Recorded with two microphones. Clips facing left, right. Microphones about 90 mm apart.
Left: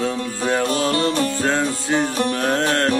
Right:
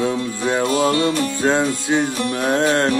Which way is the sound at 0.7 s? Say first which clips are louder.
Right 2 dB; 40° left (ahead or behind).